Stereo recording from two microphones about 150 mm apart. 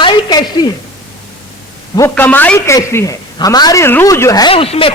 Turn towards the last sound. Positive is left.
turn(degrees=40)  # may be behind; listen again after turning